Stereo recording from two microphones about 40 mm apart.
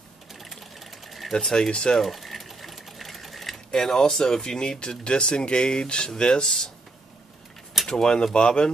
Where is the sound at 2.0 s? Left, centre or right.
Centre.